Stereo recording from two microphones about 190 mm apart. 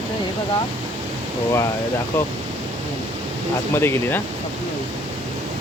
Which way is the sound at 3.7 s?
10° left (ahead or behind).